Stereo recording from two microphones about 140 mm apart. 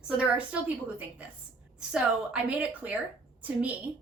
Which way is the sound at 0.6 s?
10° right (ahead or behind).